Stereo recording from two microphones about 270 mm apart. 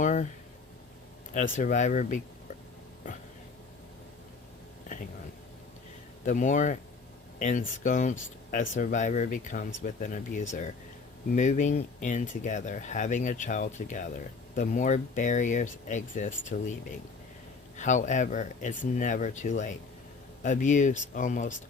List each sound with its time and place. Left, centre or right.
0.0 s a sound: left
1.5 s speech: left
6.2 s speech: left
17.7 s speech: left